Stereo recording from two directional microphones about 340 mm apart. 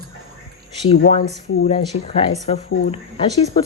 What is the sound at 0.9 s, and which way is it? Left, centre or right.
Speech, centre.